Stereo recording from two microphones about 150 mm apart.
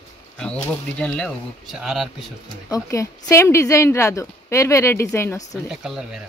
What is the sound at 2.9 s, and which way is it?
A woman's voice, 20° left (ahead or behind).